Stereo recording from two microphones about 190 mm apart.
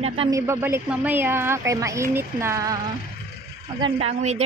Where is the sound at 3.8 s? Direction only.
30° right (ahead or behind).